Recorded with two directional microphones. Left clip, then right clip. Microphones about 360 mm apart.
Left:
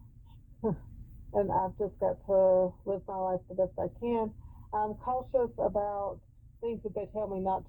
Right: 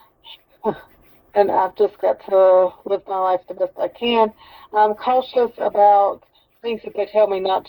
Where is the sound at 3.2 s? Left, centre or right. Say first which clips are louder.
Right 14 dB; right.